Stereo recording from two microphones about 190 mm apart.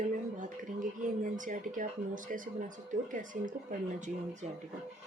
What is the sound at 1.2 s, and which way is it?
Speech, 45° right (ahead or behind).